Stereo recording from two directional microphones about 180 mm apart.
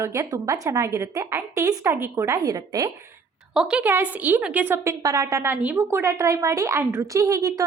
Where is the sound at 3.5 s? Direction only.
5° right (ahead or behind).